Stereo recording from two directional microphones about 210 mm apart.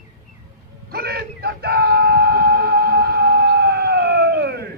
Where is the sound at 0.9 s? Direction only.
50° right (ahead or behind).